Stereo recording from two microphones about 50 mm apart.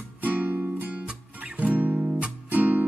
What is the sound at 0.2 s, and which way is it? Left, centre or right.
Music, right.